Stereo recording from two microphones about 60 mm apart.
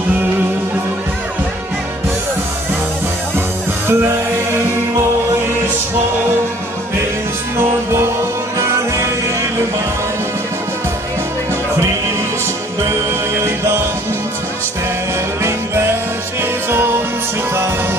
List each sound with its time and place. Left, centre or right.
3.3 s music: right
7.5 s music: right
15.4 s music: right